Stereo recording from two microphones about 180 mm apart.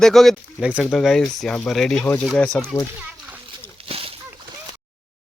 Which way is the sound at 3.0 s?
10° right (ahead or behind).